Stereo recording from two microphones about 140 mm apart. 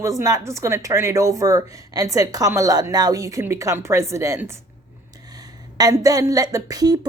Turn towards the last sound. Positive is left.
turn(degrees=-25)  # may be behind; listen again after turning